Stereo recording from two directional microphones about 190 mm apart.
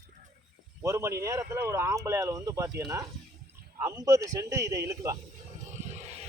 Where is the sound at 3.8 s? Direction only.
15° right (ahead or behind).